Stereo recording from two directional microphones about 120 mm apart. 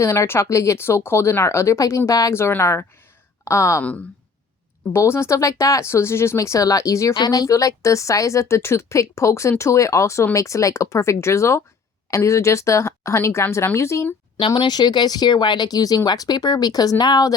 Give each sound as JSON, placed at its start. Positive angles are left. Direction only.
{"t": 0.0, "sound": "speech", "side_deg": 25}
{"t": 4.9, "sound": "speech", "side_deg": 20}
{"t": 14.3, "sound": "speech", "side_deg": 45}